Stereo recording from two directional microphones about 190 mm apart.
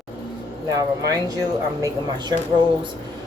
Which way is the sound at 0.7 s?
20° right (ahead or behind).